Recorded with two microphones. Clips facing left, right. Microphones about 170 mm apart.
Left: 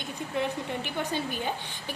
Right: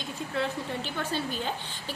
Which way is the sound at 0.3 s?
15° left (ahead or behind).